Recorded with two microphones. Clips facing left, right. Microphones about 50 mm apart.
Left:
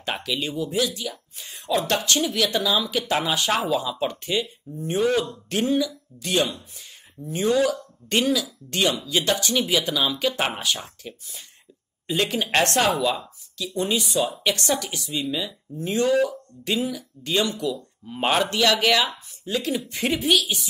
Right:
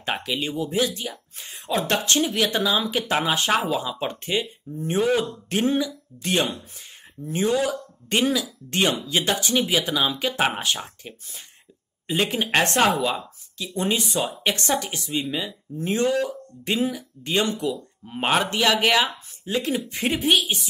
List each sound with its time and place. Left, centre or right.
0.2 s speech: right
11.0 s speech: centre
17.6 s speech: centre